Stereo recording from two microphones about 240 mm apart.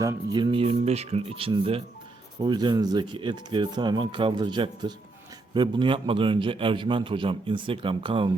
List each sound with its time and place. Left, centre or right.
0.0 s a man's voice: centre